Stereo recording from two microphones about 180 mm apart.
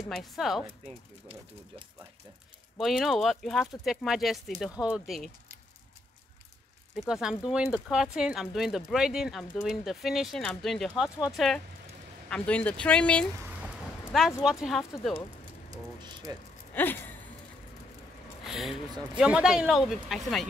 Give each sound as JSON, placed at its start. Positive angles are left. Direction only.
{"t": 0.1, "sound": "speech", "side_deg": 0}
{"t": 2.8, "sound": "speech", "side_deg": 0}
{"t": 7.0, "sound": "speech", "side_deg": -5}
{"t": 14.4, "sound": "speech", "side_deg": 0}
{"t": 15.7, "sound": "a sound", "side_deg": -20}
{"t": 16.7, "sound": "a sound", "side_deg": 10}
{"t": 18.4, "sound": "speech", "side_deg": 0}